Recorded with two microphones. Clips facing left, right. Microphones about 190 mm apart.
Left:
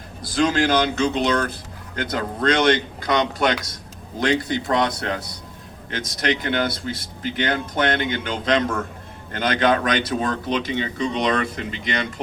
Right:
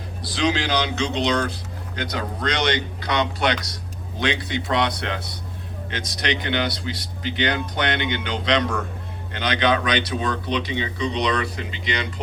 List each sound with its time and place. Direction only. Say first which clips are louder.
0.2 s speech: left 3 dB; 50° left (ahead or behind)